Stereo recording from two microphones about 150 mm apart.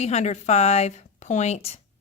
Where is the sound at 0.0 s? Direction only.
50° left (ahead or behind).